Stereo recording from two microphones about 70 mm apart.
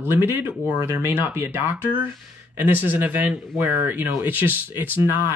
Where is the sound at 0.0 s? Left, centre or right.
Right.